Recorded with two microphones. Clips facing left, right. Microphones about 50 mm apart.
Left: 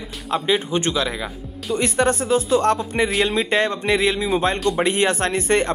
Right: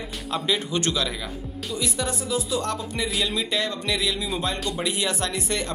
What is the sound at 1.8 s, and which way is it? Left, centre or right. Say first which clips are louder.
Speech: left 10 dB; left.